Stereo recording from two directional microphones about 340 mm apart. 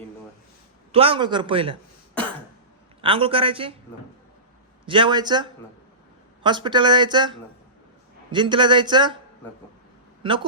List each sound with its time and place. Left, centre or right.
0.9 s speech: centre
3.0 s speech: centre
4.9 s speech: centre
10.2 s speech: centre